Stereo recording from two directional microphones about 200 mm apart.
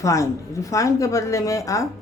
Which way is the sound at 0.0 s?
15° left (ahead or behind).